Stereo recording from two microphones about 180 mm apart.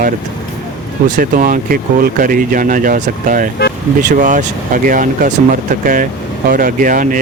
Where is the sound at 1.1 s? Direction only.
50° right (ahead or behind).